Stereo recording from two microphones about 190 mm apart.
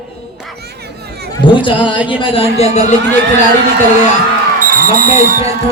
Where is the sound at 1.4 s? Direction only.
25° left (ahead or behind).